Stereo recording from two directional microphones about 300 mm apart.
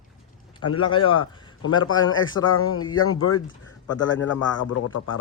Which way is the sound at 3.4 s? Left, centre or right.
Left.